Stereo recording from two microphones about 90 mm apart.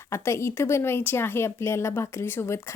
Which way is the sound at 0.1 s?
30° left (ahead or behind).